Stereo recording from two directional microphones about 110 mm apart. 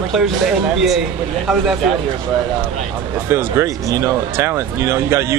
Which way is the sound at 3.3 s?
20° right (ahead or behind).